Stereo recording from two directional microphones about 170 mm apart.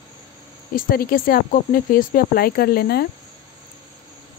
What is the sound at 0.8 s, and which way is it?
Speech, 60° left (ahead or behind).